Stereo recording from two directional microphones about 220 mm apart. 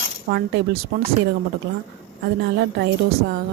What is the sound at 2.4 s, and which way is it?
Speech, 50° right (ahead or behind).